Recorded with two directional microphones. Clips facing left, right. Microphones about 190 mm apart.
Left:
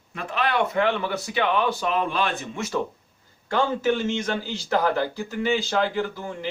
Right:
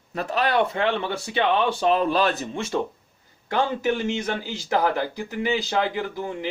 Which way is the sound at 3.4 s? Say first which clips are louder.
Left 1 dB; 15° right (ahead or behind).